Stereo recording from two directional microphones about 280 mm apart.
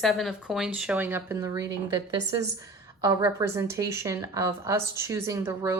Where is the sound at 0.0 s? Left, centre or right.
Centre.